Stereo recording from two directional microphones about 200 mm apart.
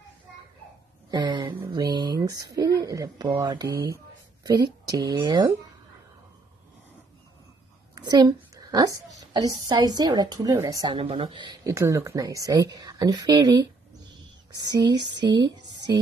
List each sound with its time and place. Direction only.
1.1 s speech: 20° right (ahead or behind)
7.9 s a woman's voice: 20° right (ahead or behind)